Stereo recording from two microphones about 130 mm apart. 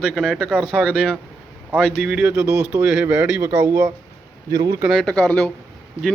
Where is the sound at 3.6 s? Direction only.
25° right (ahead or behind).